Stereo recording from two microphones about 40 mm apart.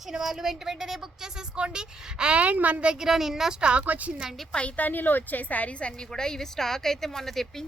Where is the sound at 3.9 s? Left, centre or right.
Right.